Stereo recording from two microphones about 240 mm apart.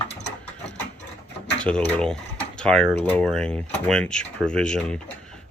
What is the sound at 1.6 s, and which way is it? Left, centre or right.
Speech, centre.